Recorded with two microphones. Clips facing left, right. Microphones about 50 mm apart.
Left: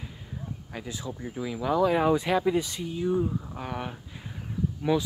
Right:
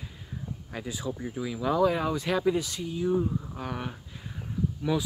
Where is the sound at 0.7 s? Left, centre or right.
Centre.